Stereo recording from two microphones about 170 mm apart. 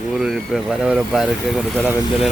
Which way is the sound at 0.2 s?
5° right (ahead or behind).